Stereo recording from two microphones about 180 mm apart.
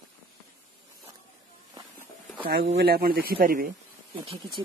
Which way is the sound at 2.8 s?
60° right (ahead or behind).